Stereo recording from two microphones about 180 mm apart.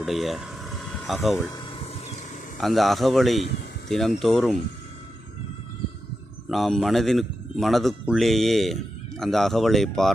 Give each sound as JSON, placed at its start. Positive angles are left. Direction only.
{"t": 0.0, "sound": "vehicle", "side_deg": 0}
{"t": 1.5, "sound": "vehicle", "side_deg": 30}
{"t": 2.6, "sound": "speech", "side_deg": 0}
{"t": 6.5, "sound": "speech", "side_deg": 0}